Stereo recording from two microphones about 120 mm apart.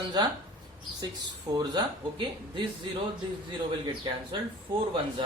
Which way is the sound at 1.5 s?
35° right (ahead or behind).